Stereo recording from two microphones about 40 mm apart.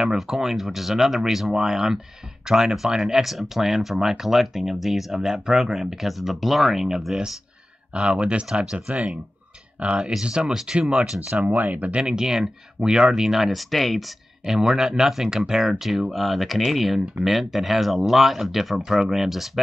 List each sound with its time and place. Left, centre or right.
0.0 s speech: centre
7.9 s speech: right
10.5 s speech: centre
11.4 s speech: right
12.2 s speech: centre
14.4 s speech: centre